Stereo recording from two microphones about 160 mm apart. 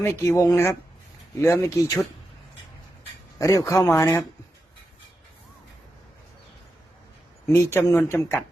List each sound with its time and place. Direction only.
0.0 s speech: 15° left (ahead or behind)
3.3 s speech: 20° left (ahead or behind)
7.4 s speech: 15° left (ahead or behind)